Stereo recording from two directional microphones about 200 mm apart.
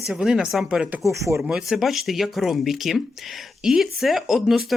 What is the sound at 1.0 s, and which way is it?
Speech, 15° right (ahead or behind).